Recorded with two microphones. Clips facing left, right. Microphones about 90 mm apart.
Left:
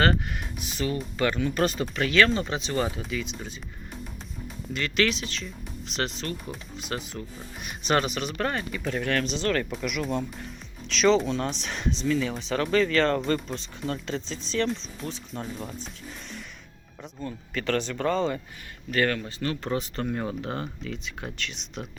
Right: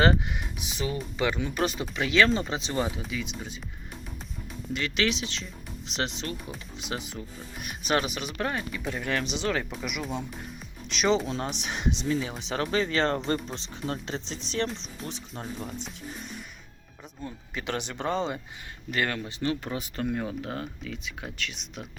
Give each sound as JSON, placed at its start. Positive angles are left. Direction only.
{"t": 0.7, "sound": "speech", "side_deg": -15}
{"t": 2.7, "sound": "speech", "side_deg": -10}
{"t": 4.7, "sound": "speech", "side_deg": -15}
{"t": 7.1, "sound": "speech", "side_deg": -5}
{"t": 12.0, "sound": "speech", "side_deg": -30}
{"t": 17.5, "sound": "speech", "side_deg": -15}
{"t": 20.1, "sound": "speech", "side_deg": 0}